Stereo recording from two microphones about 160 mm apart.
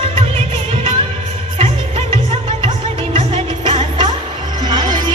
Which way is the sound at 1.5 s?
35° right (ahead or behind).